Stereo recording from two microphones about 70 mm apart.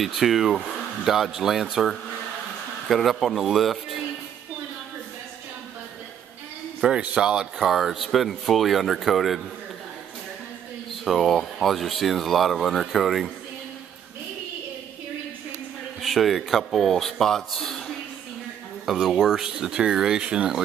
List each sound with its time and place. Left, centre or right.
0.0 s speech: centre
6.8 s a sound: centre
7.2 s speech: centre
11.1 s speech: centre
16.0 s speech: centre